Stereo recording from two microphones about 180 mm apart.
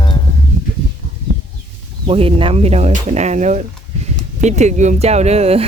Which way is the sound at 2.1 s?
30° right (ahead or behind).